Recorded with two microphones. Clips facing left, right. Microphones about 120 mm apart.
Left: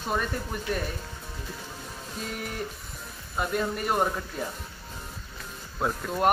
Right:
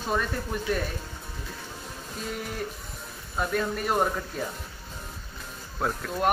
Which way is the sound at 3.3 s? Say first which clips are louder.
Even; 5° left (ahead or behind).